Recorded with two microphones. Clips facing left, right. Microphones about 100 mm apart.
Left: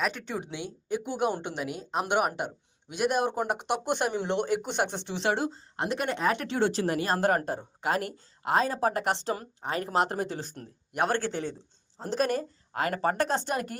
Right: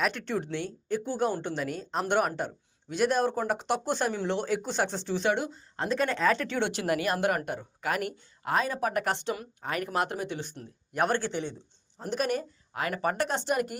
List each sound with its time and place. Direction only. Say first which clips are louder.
0.0 s a woman's voice: right 2 dB; 5° left (ahead or behind)
4.4 s speech: left 2 dB; 55° left (ahead or behind)
4.9 s a woman's voice: right 1 dB; 20° left (ahead or behind)
5.7 s a woman's voice: right 4 dB; 20° left (ahead or behind)
6.6 s a woman's voice: left 2 dB; 35° left (ahead or behind)
10.1 s a woman's voice: left 2 dB; 40° left (ahead or behind)